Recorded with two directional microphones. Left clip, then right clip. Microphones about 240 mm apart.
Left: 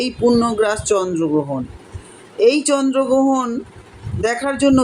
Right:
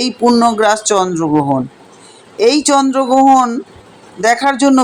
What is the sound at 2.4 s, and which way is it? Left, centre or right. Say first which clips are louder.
Speech: right 4 dB; right.